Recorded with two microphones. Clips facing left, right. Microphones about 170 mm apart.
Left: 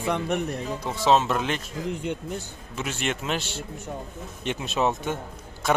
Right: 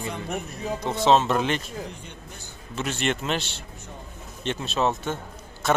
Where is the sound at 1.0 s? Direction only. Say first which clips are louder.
Right 1 dB; 5° left (ahead or behind).